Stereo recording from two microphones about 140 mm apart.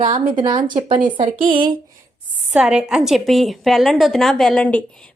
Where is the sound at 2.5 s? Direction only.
5° right (ahead or behind).